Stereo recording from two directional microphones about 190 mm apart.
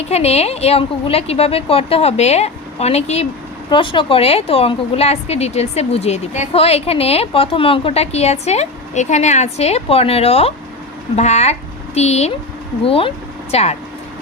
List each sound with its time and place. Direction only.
0.0 s a woman's voice: 35° left (ahead or behind)